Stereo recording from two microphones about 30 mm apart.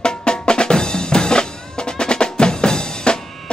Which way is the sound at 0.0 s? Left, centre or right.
Left.